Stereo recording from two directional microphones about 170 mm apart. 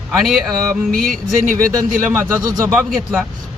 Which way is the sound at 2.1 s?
15° right (ahead or behind).